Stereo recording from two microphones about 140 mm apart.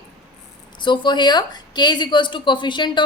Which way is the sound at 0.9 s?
30° left (ahead or behind).